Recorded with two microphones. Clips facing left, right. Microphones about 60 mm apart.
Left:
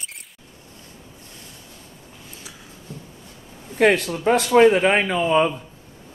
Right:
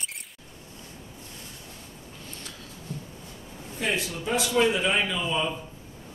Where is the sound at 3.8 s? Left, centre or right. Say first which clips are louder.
Left 12 dB; left.